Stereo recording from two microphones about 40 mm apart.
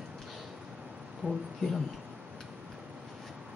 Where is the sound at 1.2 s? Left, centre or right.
Right.